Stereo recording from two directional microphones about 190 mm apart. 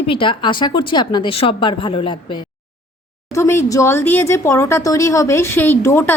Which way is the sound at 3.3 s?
10° left (ahead or behind).